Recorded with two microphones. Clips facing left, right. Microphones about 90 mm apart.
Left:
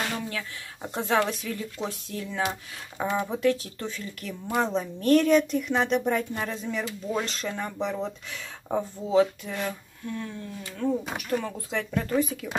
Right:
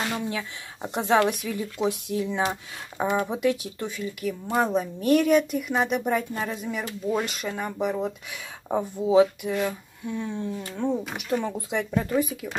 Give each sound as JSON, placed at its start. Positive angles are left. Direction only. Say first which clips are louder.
{"t": 0.1, "sound": "speech", "louder": "right 3 dB", "side_deg": -20}